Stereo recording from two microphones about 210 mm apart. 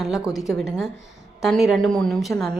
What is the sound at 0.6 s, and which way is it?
A woman's voice, centre (ahead or behind).